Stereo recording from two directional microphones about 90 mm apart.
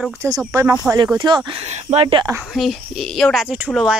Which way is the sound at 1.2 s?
65° right (ahead or behind).